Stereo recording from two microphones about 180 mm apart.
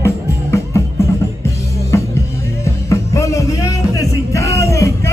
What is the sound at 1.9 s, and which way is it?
Music, 15° left (ahead or behind).